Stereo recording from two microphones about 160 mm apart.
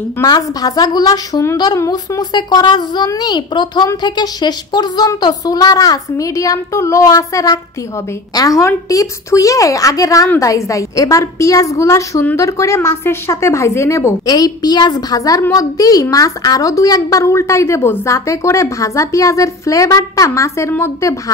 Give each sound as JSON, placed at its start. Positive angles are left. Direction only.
{"t": 0.2, "sound": "a woman's voice", "side_deg": 20}